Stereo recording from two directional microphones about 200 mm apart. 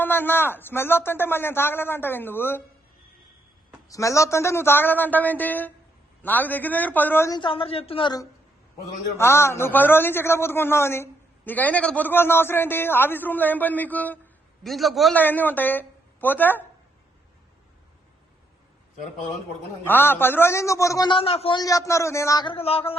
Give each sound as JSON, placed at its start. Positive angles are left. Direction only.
{"t": 0.0, "sound": "a man's voice", "side_deg": 10}
{"t": 3.8, "sound": "a man's voice", "side_deg": 15}
{"t": 19.8, "sound": "a man's voice", "side_deg": 10}